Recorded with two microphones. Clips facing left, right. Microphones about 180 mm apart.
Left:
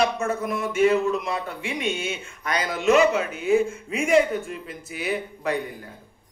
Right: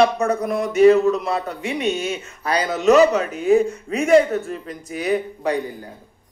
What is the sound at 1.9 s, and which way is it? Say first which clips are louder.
Speech: right 6 dB; centre (ahead or behind).